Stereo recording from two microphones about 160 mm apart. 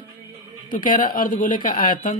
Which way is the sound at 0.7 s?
60° left (ahead or behind).